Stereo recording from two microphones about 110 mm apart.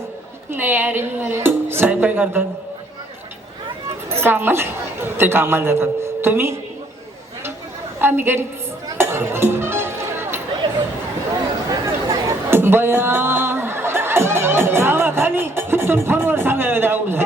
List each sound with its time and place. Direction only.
0.5 s speech: 20° right (ahead or behind)
4.2 s a man's voice: 20° right (ahead or behind)
7.9 s speech: 20° right (ahead or behind)
9.0 s music: 20° right (ahead or behind)
11.9 s a sound: 20° right (ahead or behind)